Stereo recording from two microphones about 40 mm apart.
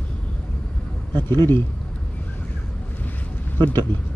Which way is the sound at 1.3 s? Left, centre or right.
Left.